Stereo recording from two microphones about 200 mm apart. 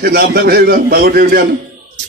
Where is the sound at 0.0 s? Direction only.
50° right (ahead or behind).